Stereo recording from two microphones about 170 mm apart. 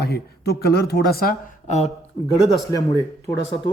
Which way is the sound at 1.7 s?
40° left (ahead or behind).